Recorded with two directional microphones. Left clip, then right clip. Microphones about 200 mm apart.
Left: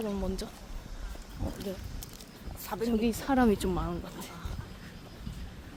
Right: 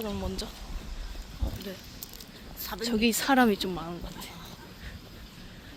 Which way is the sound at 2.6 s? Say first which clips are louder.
Even; 45° left (ahead or behind).